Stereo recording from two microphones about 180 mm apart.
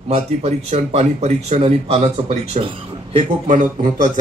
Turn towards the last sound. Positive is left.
turn(degrees=-45)  # may be behind; listen again after turning